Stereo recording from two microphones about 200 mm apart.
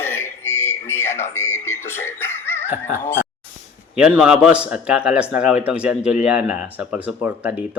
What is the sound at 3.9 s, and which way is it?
A man's voice, 5° right (ahead or behind).